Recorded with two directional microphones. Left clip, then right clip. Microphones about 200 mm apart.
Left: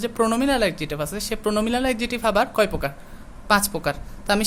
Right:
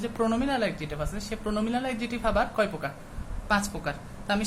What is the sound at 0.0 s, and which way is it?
A woman's voice, 50° left (ahead or behind).